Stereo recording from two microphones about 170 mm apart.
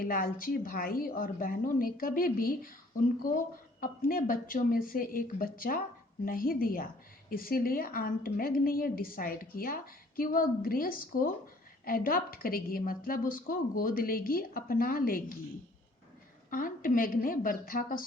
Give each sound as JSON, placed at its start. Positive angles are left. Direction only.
{"t": 0.0, "sound": "a woman's voice", "side_deg": 55}
{"t": 3.8, "sound": "a woman's voice", "side_deg": 55}
{"t": 16.5, "sound": "a woman's voice", "side_deg": 55}